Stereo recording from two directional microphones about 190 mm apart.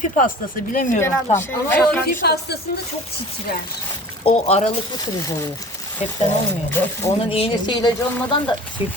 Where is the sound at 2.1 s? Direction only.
55° left (ahead or behind).